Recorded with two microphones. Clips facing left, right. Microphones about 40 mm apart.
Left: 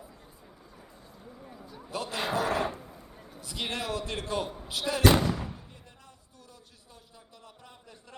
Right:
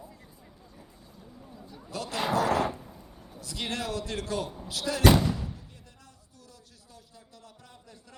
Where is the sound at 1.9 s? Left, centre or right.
Centre.